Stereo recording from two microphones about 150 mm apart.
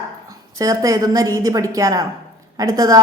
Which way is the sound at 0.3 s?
20° right (ahead or behind).